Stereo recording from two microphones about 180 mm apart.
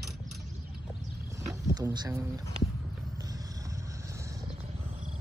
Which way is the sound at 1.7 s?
20° right (ahead or behind).